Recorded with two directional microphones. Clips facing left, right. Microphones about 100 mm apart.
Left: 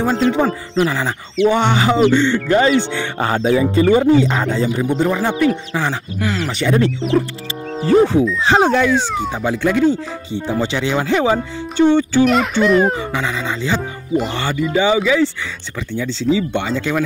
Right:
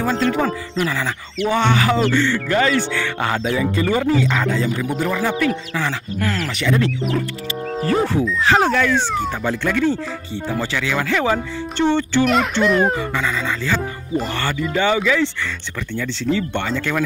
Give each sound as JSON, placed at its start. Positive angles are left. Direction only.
{"t": 0.0, "sound": "speech", "side_deg": 25}
{"t": 7.8, "sound": "speech", "side_deg": 15}
{"t": 12.6, "sound": "speech", "side_deg": 0}
{"t": 13.0, "sound": "speech", "side_deg": 15}
{"t": 16.3, "sound": "speech", "side_deg": 10}